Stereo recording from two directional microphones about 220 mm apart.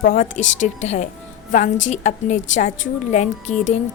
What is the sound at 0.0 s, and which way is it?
A woman's voice, 40° left (ahead or behind).